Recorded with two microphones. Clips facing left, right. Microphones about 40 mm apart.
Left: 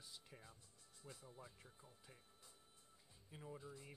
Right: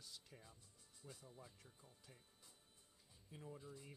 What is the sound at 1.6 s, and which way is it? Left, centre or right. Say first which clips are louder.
Speech: left 2 dB; centre.